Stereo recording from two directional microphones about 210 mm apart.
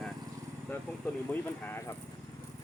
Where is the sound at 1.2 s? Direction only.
10° left (ahead or behind).